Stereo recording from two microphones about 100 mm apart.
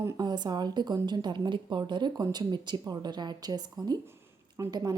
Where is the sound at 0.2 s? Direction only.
45° right (ahead or behind).